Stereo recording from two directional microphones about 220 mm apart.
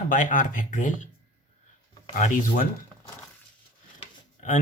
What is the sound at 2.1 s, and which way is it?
Speech, 35° left (ahead or behind).